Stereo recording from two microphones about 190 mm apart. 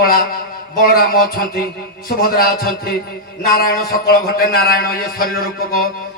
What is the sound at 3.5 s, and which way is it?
A man's voice, 50° left (ahead or behind).